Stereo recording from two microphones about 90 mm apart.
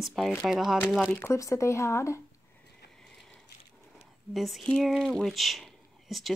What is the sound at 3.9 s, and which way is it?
Speech, centre (ahead or behind).